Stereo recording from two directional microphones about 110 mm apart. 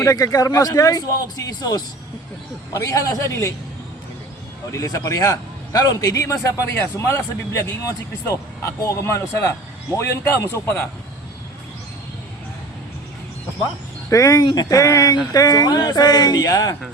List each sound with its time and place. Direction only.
0.0 s speech: 30° left (ahead or behind)
4.7 s a man's voice: 30° left (ahead or behind)
14.1 s speech: 30° left (ahead or behind)